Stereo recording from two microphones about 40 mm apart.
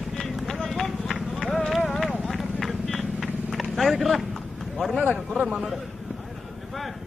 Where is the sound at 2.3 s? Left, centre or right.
Centre.